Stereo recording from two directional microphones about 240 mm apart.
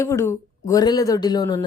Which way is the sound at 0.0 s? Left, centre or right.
Centre.